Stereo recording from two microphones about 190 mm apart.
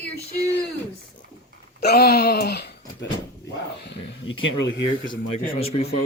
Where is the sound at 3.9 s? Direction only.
85° left.